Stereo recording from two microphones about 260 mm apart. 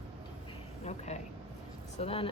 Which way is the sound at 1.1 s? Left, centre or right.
Left.